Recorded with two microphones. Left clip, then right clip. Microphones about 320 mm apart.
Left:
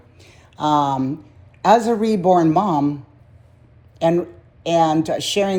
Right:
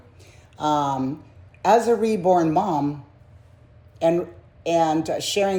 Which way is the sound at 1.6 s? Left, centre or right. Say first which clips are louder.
Left 3 dB; left.